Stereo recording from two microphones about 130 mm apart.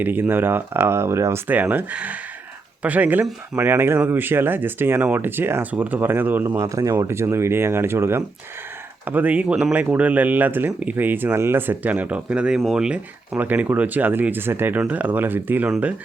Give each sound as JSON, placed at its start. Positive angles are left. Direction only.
{"t": 0.0, "sound": "speech", "side_deg": -15}